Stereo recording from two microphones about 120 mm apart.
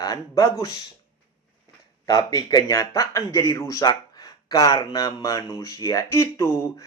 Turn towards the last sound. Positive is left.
turn(degrees=25)  # may be behind; listen again after turning